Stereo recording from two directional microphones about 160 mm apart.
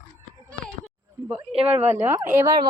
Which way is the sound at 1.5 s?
40° right (ahead or behind).